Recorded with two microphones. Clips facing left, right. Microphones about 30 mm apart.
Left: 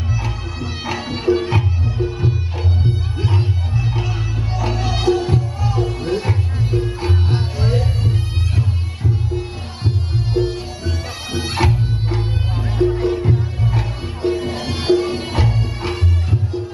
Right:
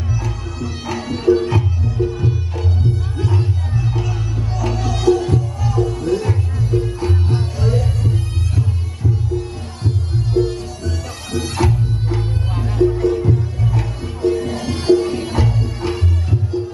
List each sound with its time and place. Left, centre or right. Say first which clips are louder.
0.1 s music: even; left